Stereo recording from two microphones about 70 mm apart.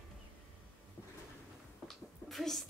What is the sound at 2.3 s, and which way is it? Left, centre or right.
Speech, centre.